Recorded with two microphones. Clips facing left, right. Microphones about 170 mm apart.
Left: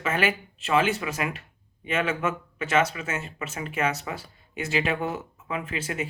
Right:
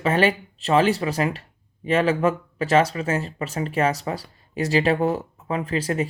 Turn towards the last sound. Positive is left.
turn(degrees=-35)  # may be behind; listen again after turning